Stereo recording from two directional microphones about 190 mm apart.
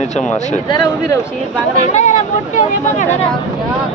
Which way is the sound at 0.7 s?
20° left (ahead or behind).